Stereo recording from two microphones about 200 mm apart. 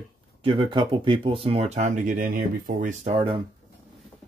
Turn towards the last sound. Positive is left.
turn(degrees=-25)  # may be behind; listen again after turning